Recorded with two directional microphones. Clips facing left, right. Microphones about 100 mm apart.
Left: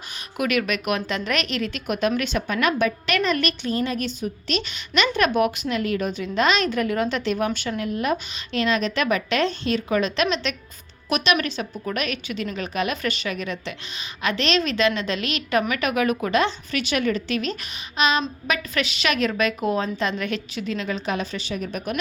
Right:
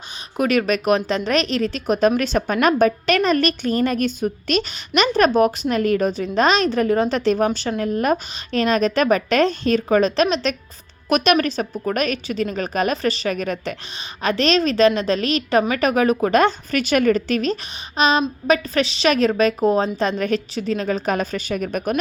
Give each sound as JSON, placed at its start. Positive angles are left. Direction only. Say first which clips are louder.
{"t": 0.3, "sound": "a woman's voice", "louder": "right 5 dB", "side_deg": -35}
{"t": 11.1, "sound": "a woman's voice", "louder": "right 5 dB", "side_deg": -45}